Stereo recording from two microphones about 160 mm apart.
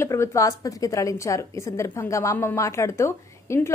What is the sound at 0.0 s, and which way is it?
A woman's voice, 20° left (ahead or behind).